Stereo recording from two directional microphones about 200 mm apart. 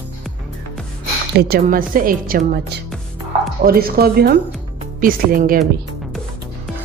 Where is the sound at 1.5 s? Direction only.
45° right (ahead or behind).